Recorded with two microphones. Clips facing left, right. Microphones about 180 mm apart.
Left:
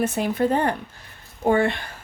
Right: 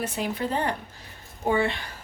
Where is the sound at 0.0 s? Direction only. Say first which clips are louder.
Left 7 dB; 50° left (ahead or behind).